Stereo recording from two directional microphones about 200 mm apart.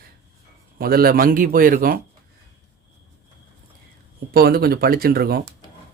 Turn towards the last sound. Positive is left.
turn(degrees=-50)  # may be behind; listen again after turning